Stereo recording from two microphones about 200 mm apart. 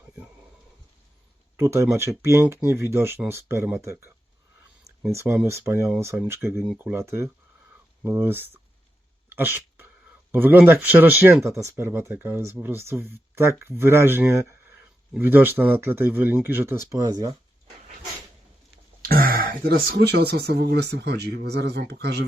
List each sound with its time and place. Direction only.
1.5 s speech: 10° right (ahead or behind)
5.1 s speech: 10° right (ahead or behind)
9.3 s dog: 10° right (ahead or behind)
10.3 s speech: 10° right (ahead or behind)
19.0 s speech: 50° right (ahead or behind)